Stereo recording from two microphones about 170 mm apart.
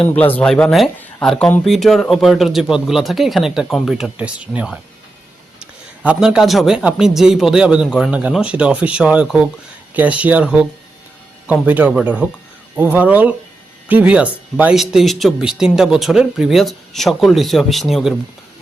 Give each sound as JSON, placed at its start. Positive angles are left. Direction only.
{"t": 0.1, "sound": "a man's voice", "side_deg": 10}